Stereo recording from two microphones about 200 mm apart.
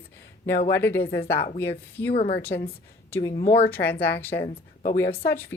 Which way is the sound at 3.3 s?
30° left (ahead or behind).